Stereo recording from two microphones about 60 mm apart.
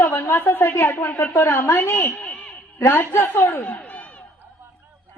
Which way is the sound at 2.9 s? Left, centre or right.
Left.